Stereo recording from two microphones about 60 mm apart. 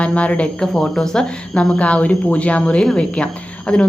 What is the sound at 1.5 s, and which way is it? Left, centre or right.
A woman's voice, centre.